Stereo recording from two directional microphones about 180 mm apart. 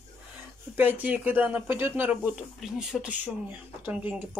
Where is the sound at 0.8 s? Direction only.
10° right (ahead or behind).